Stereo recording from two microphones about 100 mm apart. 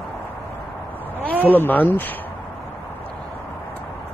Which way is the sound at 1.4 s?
20° left (ahead or behind).